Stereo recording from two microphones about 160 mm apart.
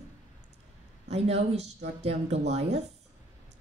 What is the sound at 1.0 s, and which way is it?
A woman's voice, 40° right (ahead or behind).